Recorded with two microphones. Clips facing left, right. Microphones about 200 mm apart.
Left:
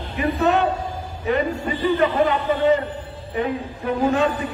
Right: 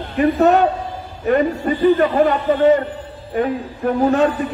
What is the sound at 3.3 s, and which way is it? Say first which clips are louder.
Speech: right 4 dB; 50° right (ahead or behind).